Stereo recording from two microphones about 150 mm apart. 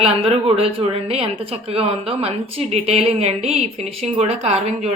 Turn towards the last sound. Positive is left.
turn(degrees=-45)  # may be behind; listen again after turning